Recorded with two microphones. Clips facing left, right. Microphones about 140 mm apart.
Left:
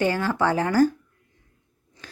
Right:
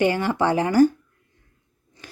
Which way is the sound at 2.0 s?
10° right (ahead or behind).